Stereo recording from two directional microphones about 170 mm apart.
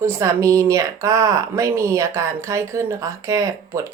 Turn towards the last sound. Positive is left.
turn(degrees=-20)  # may be behind; listen again after turning